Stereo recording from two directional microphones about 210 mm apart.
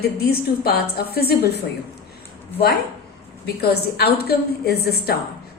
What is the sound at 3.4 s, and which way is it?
A woman's voice, 50° left (ahead or behind).